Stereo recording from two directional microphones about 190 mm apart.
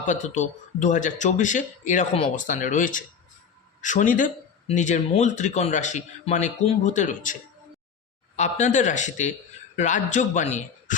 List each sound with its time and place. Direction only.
0.1 s speech: 40° left (ahead or behind)
8.4 s speech: 40° left (ahead or behind)